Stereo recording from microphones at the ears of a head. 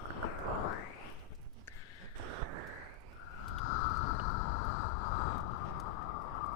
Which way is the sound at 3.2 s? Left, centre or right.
Left.